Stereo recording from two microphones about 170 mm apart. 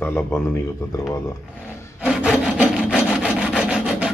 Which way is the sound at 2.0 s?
Centre (ahead or behind).